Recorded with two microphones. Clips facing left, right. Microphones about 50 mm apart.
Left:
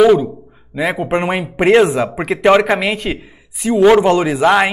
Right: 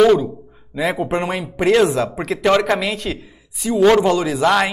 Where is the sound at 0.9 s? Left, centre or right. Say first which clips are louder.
Left 4 dB; left.